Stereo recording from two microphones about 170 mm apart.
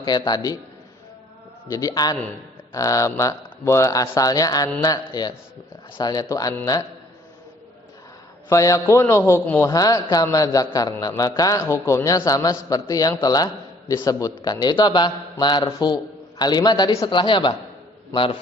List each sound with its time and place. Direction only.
0.0 s a man's voice: 25° left (ahead or behind)
1.6 s a man's voice: 20° left (ahead or behind)
8.4 s a man's voice: 20° left (ahead or behind)